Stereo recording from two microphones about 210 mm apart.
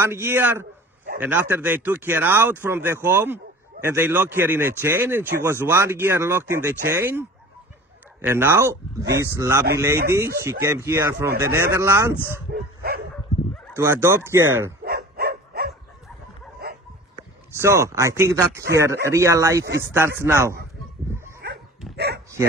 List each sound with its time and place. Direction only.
0.0 s speech: 10° right (ahead or behind)
12.5 s dog: 50° right (ahead or behind)
13.7 s speech: 10° right (ahead or behind)
14.9 s dog: 45° right (ahead or behind)
17.6 s speech: 15° right (ahead or behind)
21.4 s dog: 50° right (ahead or behind)